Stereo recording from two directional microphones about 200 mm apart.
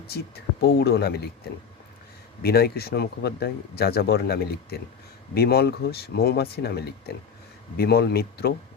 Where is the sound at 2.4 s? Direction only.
50° left (ahead or behind).